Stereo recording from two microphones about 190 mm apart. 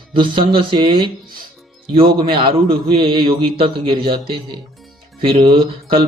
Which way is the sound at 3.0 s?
25° right (ahead or behind).